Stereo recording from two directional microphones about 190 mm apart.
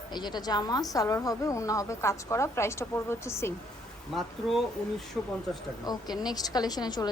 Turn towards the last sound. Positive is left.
turn(degrees=20)  # may be behind; listen again after turning